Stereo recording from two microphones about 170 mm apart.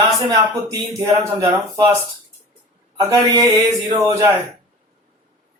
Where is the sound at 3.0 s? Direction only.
20° right (ahead or behind).